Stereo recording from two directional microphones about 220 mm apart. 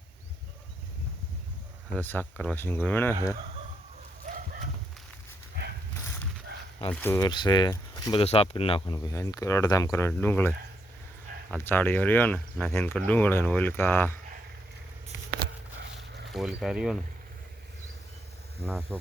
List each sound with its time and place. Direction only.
2.0 s speech: 10° left (ahead or behind)
4.3 s dog: 40° right (ahead or behind)
6.9 s speech: 10° left (ahead or behind)
8.2 s speech: 25° left (ahead or behind); by 10.5 s 10° left (ahead or behind)
11.5 s speech: 10° left (ahead or behind)
16.3 s speech: centre (ahead or behind)
18.7 s speech: 5° right (ahead or behind)